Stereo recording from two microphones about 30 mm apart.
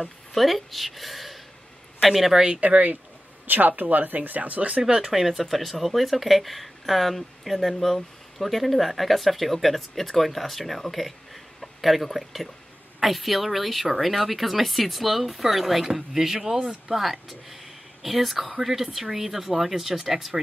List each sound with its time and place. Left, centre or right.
0.0 s speech: centre
2.6 s speech: right
3.4 s speech: right
3.8 s speech: right
4.8 s speech: right
5.1 s speech: centre
5.4 s speech: centre
16.5 s speech: right
16.9 s speech: centre